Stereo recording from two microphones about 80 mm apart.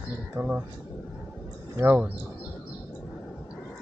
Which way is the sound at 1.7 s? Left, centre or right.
Right.